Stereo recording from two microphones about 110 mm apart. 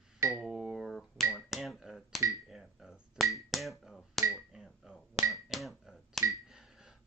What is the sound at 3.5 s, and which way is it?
Finger snapping, centre (ahead or behind).